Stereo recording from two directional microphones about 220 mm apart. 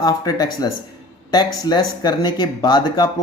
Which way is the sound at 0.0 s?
15° left (ahead or behind).